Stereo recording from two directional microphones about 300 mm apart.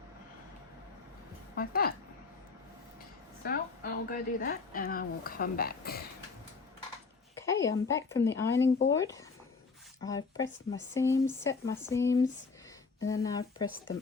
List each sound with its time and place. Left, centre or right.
1.5 s speech: left
3.4 s speech: left
7.3 s speech: centre